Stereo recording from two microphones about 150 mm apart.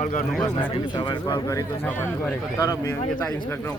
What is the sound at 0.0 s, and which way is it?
Speech, 60° left (ahead or behind).